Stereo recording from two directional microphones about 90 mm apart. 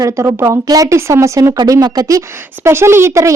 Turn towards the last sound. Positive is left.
turn(degrees=-35)  # may be behind; listen again after turning